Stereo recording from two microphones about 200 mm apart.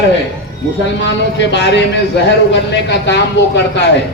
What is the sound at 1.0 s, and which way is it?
A man's voice, 60° left (ahead or behind).